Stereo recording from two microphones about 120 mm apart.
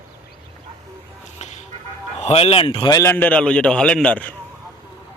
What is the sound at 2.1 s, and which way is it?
Speech, 60° left (ahead or behind).